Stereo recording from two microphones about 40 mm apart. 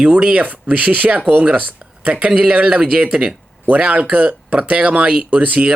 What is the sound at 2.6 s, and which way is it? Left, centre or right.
Speech, centre.